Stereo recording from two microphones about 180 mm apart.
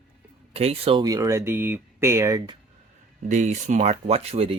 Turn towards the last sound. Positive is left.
turn(degrees=-35)  # may be behind; listen again after turning